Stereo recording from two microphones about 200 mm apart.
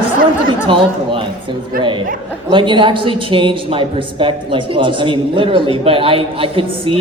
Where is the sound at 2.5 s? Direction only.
25° right (ahead or behind).